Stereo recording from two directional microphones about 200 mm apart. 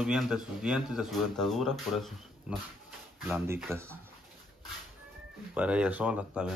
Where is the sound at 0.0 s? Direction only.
Centre (ahead or behind).